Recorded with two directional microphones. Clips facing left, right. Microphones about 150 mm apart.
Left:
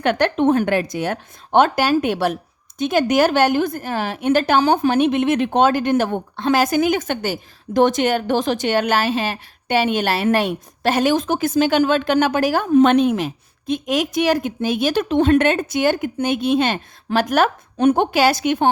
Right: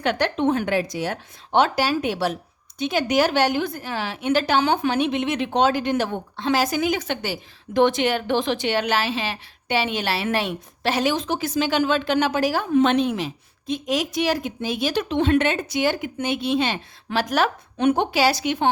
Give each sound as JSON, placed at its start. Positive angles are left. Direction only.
{"t": 0.0, "sound": "a woman's voice", "side_deg": 55}